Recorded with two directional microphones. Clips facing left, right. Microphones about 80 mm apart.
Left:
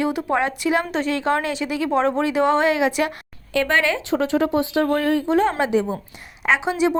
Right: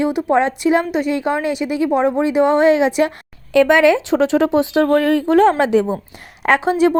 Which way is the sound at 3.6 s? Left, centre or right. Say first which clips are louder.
Right 8 dB; right.